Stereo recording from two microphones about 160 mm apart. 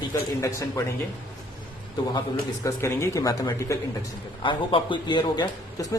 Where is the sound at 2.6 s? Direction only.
15° left (ahead or behind).